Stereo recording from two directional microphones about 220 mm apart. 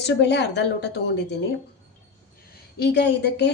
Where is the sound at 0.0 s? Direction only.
50° left (ahead or behind).